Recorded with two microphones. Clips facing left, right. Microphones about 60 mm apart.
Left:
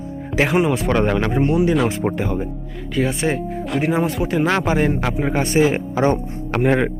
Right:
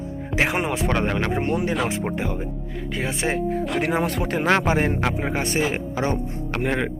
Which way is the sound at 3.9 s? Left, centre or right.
Right.